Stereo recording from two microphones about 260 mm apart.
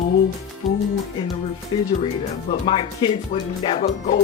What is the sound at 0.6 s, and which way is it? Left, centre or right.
Music, centre.